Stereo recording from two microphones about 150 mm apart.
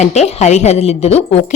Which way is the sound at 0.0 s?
50° left (ahead or behind).